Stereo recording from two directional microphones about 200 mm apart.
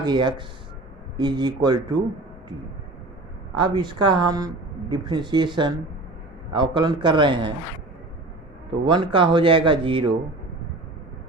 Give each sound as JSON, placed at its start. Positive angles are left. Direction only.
{"t": 0.0, "sound": "speech", "side_deg": -20}
{"t": 3.5, "sound": "speech", "side_deg": -20}
{"t": 8.7, "sound": "speech", "side_deg": -25}